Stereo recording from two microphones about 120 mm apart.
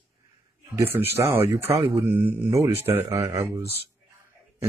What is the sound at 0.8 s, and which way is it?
Speech, 20° right (ahead or behind).